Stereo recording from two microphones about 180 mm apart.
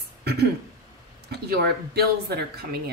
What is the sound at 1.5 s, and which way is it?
A woman's voice, 60° right (ahead or behind).